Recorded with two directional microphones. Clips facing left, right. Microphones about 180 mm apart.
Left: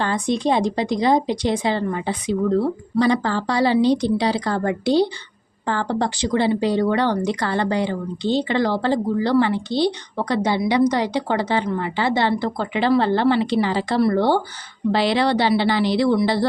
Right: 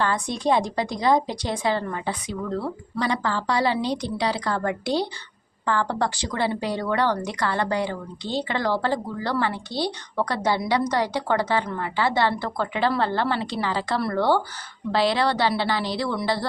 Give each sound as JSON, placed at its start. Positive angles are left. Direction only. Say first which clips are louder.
{"t": 0.0, "sound": "speech", "louder": "left 3 dB", "side_deg": 25}